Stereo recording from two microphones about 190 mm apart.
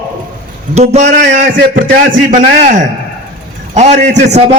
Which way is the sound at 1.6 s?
50° right (ahead or behind).